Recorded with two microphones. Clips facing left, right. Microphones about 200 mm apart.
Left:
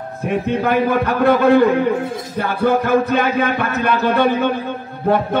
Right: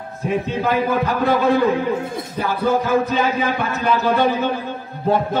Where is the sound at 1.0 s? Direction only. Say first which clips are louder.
Left 4 dB; 60° left (ahead or behind).